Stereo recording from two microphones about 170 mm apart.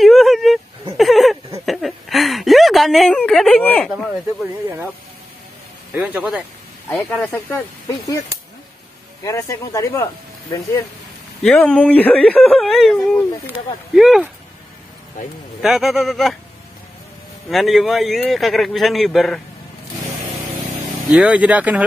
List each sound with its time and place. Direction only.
0.0 s a sound: centre (ahead or behind)
5.9 s speech: 10° right (ahead or behind)
7.3 s speech: 10° left (ahead or behind)
9.2 s speech: 20° left (ahead or behind)
11.4 s speech: 5° left (ahead or behind)
15.6 s speech: centre (ahead or behind)
17.5 s speech: centre (ahead or behind)
21.1 s speech: 5° right (ahead or behind)